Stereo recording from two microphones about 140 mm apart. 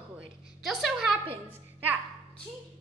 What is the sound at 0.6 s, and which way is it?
Speech, centre (ahead or behind).